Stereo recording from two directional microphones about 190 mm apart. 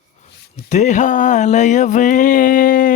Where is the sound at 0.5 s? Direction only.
35° left (ahead or behind).